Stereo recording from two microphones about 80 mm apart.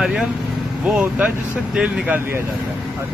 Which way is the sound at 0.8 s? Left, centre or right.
Centre.